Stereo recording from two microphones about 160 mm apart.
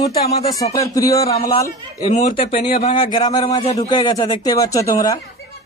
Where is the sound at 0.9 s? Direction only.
20° left (ahead or behind).